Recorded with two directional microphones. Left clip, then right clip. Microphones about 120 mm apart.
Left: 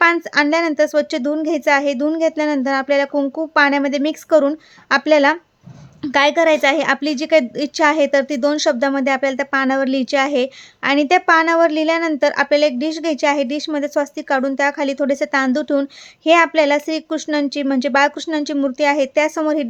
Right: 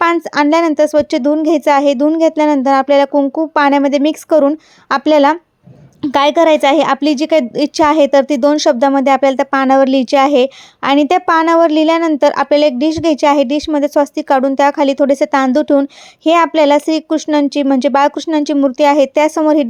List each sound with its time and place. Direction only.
0.0 s a woman's voice: 40° right (ahead or behind)